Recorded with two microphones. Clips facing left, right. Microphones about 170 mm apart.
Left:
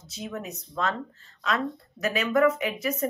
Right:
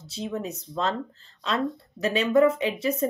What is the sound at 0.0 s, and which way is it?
Speech, 30° right (ahead or behind).